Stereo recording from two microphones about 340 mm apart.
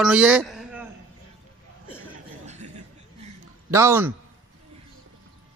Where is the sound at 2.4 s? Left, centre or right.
Centre.